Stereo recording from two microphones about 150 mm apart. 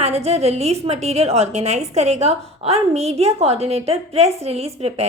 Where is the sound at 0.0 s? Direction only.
45° right (ahead or behind).